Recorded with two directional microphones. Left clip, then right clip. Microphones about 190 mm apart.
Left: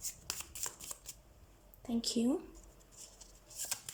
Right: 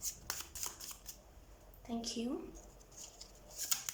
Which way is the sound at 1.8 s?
25° left (ahead or behind).